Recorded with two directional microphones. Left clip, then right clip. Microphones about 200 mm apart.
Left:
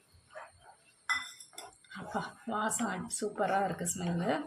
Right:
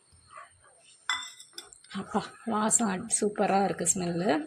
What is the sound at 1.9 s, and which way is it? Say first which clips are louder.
A woman's voice: right 5 dB; 40° right (ahead or behind).